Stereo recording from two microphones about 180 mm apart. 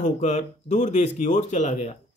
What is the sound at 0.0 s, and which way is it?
Speech, 40° left (ahead or behind).